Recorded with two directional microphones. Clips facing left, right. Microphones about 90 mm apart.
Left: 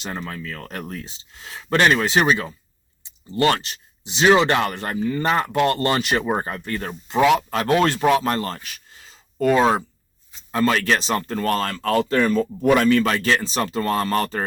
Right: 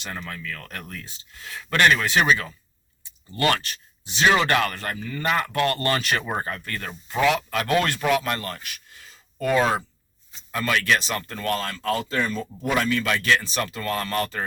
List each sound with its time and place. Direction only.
0.0 s speech: 25° left (ahead or behind)